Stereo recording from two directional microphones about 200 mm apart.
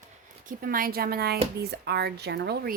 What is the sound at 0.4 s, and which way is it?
Speech, 45° right (ahead or behind).